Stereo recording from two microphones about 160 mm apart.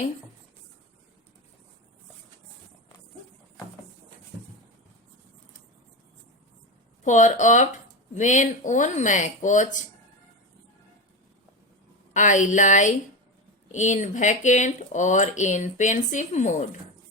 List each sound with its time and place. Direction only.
7.0 s speech: 50° left (ahead or behind)
12.1 s speech: 50° left (ahead or behind)